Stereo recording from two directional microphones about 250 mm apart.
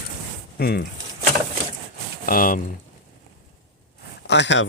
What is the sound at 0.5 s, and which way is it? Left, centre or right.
Speech, left.